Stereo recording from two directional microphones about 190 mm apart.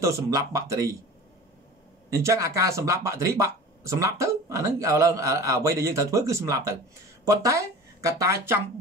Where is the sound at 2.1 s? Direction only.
15° right (ahead or behind).